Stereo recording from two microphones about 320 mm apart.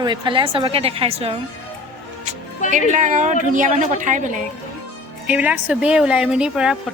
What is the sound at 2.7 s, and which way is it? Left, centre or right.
A woman's voice, right.